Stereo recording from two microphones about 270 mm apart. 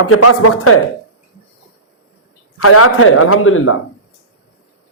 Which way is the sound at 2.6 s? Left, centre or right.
Left.